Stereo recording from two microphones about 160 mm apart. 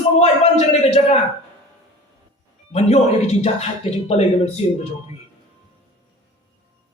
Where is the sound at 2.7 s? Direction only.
45° left (ahead or behind).